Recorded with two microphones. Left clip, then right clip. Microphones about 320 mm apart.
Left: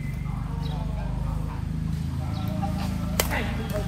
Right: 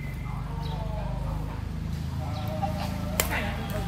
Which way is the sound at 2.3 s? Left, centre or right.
Right.